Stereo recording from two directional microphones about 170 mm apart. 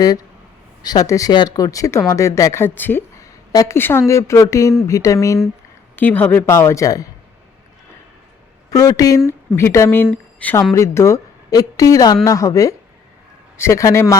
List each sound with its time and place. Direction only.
0.8 s speech: 20° left (ahead or behind)
8.7 s speech: 20° left (ahead or behind)